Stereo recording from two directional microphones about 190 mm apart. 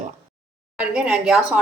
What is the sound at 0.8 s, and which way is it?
Speech, 5° right (ahead or behind).